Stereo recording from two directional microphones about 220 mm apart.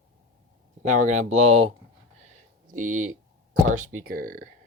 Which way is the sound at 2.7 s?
35° right (ahead or behind).